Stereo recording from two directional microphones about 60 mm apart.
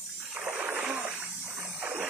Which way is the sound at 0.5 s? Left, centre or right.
Right.